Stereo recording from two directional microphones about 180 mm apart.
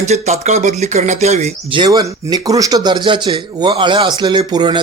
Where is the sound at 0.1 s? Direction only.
40° right (ahead or behind).